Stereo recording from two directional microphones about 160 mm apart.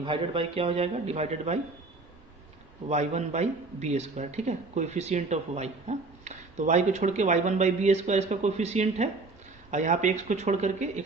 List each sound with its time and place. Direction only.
0.0 s a man's voice: 35° right (ahead or behind)
2.9 s a man's voice: 45° right (ahead or behind)